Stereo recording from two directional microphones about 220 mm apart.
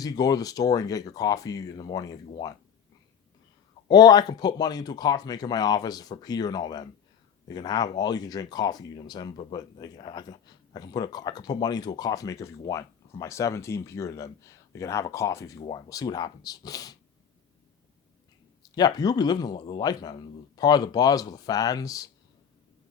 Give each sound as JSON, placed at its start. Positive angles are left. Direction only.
{"t": 0.0, "sound": "speech", "side_deg": 15}
{"t": 3.8, "sound": "speech", "side_deg": 20}
{"t": 18.6, "sound": "speech", "side_deg": 20}